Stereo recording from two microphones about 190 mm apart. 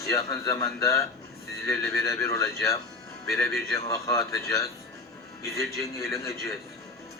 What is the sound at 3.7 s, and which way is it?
Speech, 15° left (ahead or behind).